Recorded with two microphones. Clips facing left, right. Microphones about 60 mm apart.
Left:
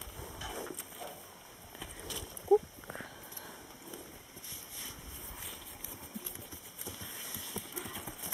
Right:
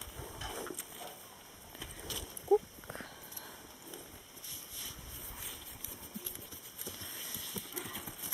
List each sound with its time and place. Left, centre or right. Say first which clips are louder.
0.2 s a sound: left 1 dB; centre
1.8 s walk: left 1 dB; centre
6.2 s engine: left 1 dB; centre
7.5 s clip-clop: left 1 dB; centre